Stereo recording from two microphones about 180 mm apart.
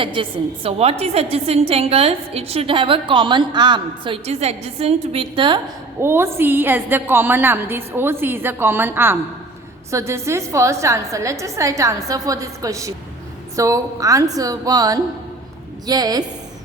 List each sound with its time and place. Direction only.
0.0 s a woman's voice: 30° right (ahead or behind)
6.0 s a woman's voice: 15° right (ahead or behind)